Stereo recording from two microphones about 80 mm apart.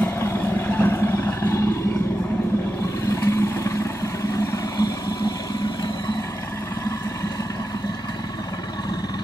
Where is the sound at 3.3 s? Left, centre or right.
Left.